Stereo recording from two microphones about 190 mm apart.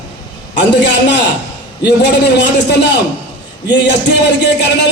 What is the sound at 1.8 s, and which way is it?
Speech, 60° left (ahead or behind).